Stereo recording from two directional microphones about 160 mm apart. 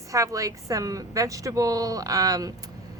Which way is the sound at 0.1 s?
20° right (ahead or behind).